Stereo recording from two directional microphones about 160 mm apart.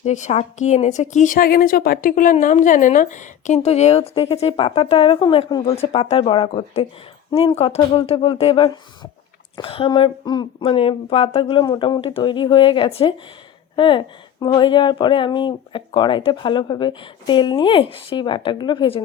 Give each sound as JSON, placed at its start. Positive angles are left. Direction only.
{"t": 0.0, "sound": "a woman's voice", "side_deg": 45}
{"t": 5.8, "sound": "speech", "side_deg": 40}